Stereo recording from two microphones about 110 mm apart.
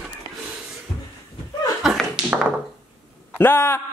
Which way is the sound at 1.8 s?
5° right (ahead or behind).